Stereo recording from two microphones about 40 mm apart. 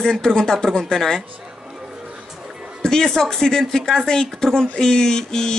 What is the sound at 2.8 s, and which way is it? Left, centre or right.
Speech, centre.